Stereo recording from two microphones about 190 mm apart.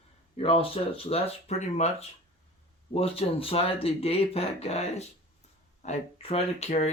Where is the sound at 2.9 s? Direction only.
30° left (ahead or behind).